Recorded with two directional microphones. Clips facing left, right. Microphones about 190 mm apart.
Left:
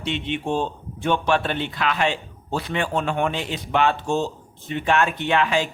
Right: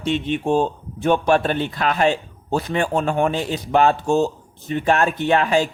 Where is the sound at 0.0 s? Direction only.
45° right (ahead or behind).